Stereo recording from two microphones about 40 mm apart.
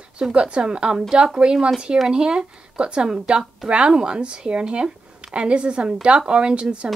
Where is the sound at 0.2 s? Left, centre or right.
Right.